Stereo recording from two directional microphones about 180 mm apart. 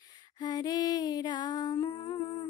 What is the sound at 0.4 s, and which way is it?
Music, 25° left (ahead or behind).